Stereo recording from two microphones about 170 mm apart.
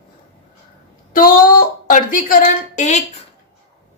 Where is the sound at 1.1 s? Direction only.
55° left (ahead or behind).